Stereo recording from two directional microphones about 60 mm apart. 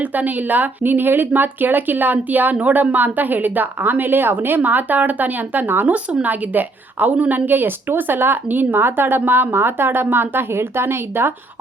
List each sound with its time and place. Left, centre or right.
0.0 s speech: right